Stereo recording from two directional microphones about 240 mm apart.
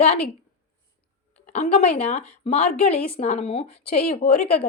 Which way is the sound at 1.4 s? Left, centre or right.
Left.